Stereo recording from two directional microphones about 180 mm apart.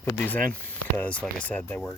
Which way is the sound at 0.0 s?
10° left (ahead or behind).